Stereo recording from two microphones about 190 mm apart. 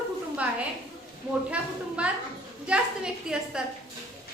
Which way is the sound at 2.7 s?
5° right (ahead or behind).